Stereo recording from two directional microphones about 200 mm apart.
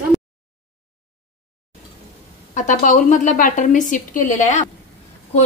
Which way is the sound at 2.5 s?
40° left (ahead or behind).